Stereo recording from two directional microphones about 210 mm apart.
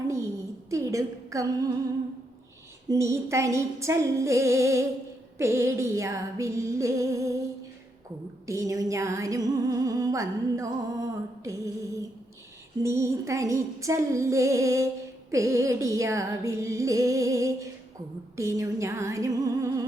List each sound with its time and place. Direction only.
0.7 s a woman's voice: 15° right (ahead or behind)
2.9 s music: 15° right (ahead or behind)
8.4 s music: 15° right (ahead or behind)
12.8 s music: 15° right (ahead or behind)